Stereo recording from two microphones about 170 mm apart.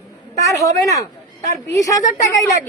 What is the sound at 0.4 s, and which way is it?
Speech, 20° left (ahead or behind).